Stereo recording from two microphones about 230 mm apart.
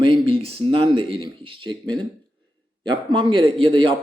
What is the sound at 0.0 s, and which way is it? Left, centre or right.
A man's voice, right.